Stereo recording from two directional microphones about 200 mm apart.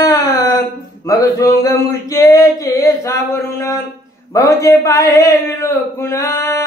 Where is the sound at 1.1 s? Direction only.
15° left (ahead or behind).